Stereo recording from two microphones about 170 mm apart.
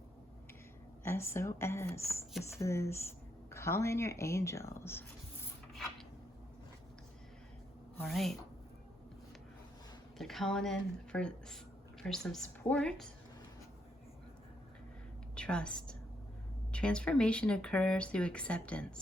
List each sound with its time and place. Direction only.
1.0 s speech: 15° left (ahead or behind)
5.7 s a sound: centre (ahead or behind)
8.0 s speech: centre (ahead or behind)
10.2 s speech: centre (ahead or behind)
15.4 s a woman's voice: 5° left (ahead or behind)